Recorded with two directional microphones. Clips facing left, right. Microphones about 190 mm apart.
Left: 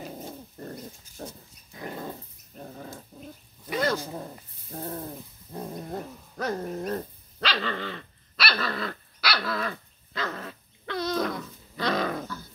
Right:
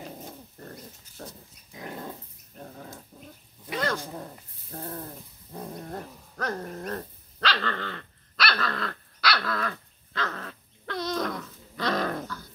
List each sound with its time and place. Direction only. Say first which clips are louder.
0.6 s dog: left 5 dB; 25° left (ahead or behind)
1.8 s dog: left 2 dB; 10° left (ahead or behind)